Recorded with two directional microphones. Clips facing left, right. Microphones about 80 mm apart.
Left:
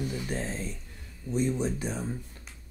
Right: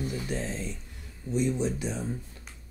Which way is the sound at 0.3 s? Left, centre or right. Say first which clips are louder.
Even; left.